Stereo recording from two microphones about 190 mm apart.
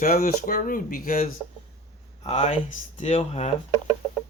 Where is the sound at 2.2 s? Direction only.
30° left (ahead or behind).